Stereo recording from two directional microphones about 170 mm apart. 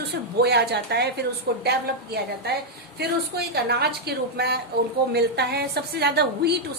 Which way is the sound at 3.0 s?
70° right (ahead or behind).